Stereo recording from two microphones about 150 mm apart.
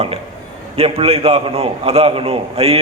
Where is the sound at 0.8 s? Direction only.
40° right (ahead or behind).